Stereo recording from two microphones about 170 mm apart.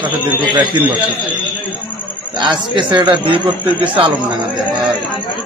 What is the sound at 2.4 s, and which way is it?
Speech, 25° right (ahead or behind).